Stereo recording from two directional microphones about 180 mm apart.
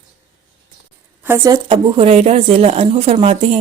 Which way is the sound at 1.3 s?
20° right (ahead or behind).